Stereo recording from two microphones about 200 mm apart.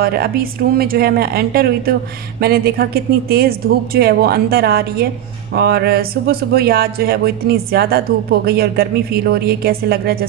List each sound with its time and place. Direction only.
0.0 s speech: 50° right (ahead or behind)